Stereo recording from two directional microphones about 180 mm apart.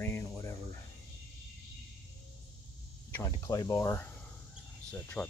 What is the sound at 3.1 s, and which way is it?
Speech, 15° left (ahead or behind).